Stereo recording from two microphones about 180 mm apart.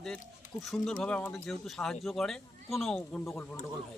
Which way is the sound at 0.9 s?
5° left (ahead or behind).